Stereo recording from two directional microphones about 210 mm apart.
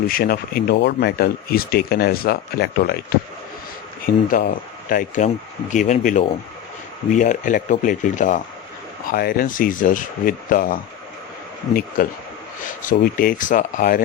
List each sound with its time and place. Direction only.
0.1 s speech: 45° left (ahead or behind)
4.0 s speech: 40° left (ahead or behind)